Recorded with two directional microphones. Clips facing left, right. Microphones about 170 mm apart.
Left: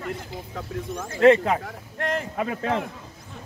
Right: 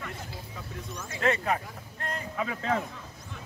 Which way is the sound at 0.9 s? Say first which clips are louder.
Left 8 dB; 50° left (ahead or behind).